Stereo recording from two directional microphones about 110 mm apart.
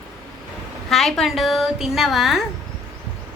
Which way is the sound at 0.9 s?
5° left (ahead or behind).